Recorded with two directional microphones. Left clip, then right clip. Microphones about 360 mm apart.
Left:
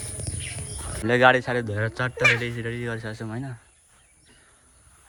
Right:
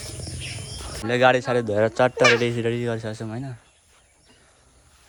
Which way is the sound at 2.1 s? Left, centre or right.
Right.